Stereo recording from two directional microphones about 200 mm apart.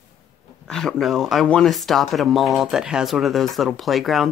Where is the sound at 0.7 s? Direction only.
5° left (ahead or behind).